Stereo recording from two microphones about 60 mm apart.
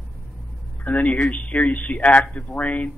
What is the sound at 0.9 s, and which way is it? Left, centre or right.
A man's voice, left.